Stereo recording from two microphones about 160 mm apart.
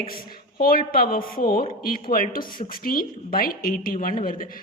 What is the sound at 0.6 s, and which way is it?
A woman's voice, 65° left (ahead or behind).